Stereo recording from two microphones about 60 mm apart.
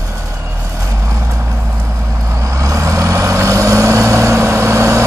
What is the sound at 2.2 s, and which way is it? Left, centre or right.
Vehicle, right.